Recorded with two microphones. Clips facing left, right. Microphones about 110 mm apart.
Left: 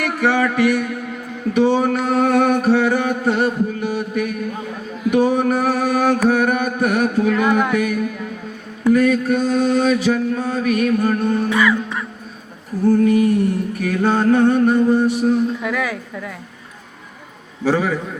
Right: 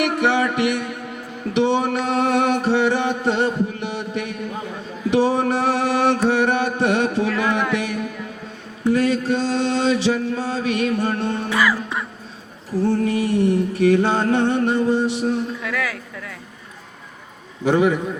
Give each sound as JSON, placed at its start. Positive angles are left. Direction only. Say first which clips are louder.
{"t": 0.0, "sound": "mantra", "louder": "left 1 dB", "side_deg": -25}
{"t": 7.3, "sound": "speech", "louder": "left 4 dB", "side_deg": 15}
{"t": 7.7, "sound": "mantra", "louder": "left 4 dB", "side_deg": -25}
{"t": 11.4, "sound": "music", "louder": "left 3 dB", "side_deg": 0}
{"t": 12.8, "sound": "mantra", "louder": "left 6 dB", "side_deg": -30}
{"t": 15.6, "sound": "speech", "louder": "left 4 dB", "side_deg": 15}
{"t": 17.7, "sound": "mantra", "louder": "right 2 dB", "side_deg": -20}